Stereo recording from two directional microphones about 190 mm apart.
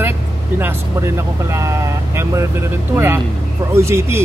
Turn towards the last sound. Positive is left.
turn(degrees=-15)  # may be behind; listen again after turning